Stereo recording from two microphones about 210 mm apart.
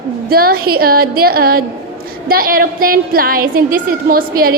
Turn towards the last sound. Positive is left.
turn(degrees=-45)  # may be behind; listen again after turning